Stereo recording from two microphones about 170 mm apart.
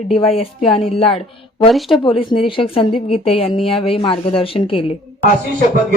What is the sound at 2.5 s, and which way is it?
Speech, 30° left (ahead or behind).